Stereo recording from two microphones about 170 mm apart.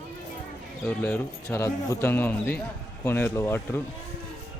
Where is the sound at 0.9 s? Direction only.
10° left (ahead or behind).